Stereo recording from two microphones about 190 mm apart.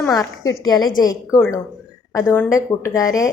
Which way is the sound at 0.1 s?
20° left (ahead or behind).